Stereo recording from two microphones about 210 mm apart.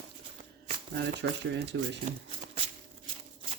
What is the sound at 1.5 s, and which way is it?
Speech, 55° right (ahead or behind).